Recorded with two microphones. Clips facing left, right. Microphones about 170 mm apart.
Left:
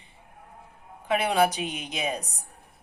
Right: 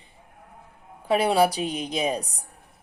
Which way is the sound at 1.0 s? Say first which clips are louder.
Right 3 dB; 35° right (ahead or behind).